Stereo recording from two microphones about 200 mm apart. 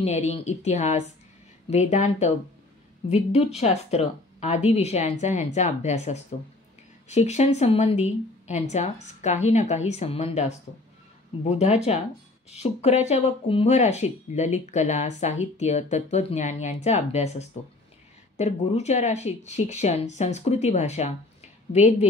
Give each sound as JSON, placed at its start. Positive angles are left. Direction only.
{"t": 0.0, "sound": "speech", "side_deg": 35}